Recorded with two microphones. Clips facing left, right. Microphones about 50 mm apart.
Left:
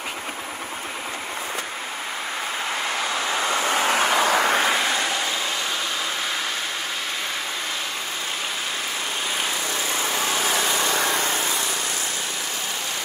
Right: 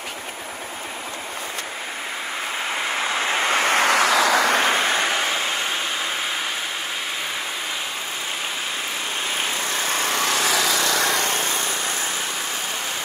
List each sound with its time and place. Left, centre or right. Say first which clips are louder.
3.0 s vehicle: right 4 dB; right
3.4 s vehicle: right 4 dB; right
4.9 s a sound: right 3 dB; right
10.0 s vehicle: right 2 dB; right